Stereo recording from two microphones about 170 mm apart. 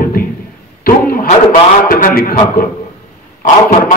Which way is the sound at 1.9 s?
60° left (ahead or behind).